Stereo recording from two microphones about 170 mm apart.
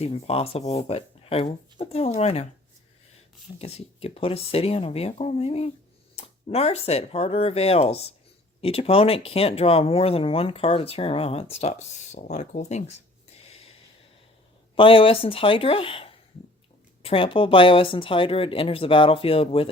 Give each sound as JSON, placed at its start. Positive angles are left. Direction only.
{"t": 0.0, "sound": "speech", "side_deg": 35}
{"t": 3.6, "sound": "speech", "side_deg": 35}
{"t": 14.8, "sound": "speech", "side_deg": 30}